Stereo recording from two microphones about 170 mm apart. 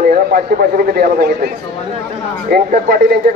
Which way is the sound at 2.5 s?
60° right (ahead or behind).